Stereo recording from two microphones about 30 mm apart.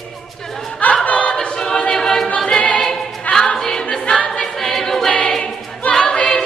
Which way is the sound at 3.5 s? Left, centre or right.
Left.